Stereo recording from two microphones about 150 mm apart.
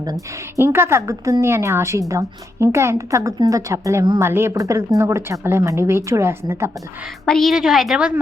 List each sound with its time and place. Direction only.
0.6 s a woman's voice: 15° right (ahead or behind)
7.3 s a woman's voice: centre (ahead or behind)